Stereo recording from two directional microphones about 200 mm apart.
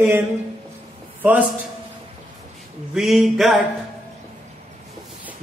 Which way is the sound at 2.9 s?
Centre (ahead or behind).